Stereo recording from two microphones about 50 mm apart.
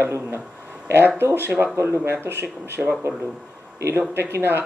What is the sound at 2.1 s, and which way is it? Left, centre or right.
Speech, right.